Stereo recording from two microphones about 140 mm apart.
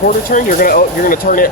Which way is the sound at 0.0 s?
85° left.